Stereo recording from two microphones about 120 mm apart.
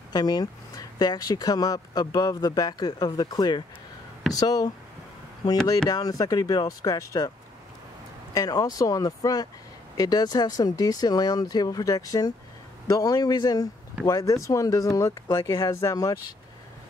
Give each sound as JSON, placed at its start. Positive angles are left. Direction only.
{"t": 0.1, "sound": "speech", "side_deg": 35}
{"t": 5.9, "sound": "speech", "side_deg": 30}